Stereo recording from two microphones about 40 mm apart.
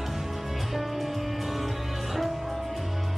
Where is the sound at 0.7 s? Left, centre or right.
Centre.